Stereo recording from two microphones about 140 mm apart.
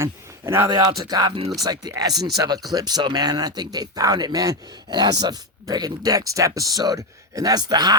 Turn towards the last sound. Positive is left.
turn(degrees=-30)  # may be behind; listen again after turning